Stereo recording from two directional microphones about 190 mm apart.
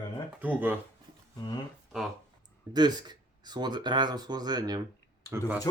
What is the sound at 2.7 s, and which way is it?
Speech, 20° right (ahead or behind).